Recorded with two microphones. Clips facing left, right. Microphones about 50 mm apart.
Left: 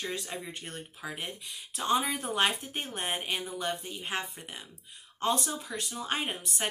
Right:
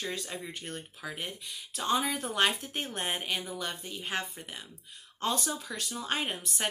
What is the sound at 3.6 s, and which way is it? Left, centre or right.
Speech, left.